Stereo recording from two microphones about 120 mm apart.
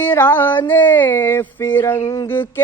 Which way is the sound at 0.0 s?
20° left (ahead or behind).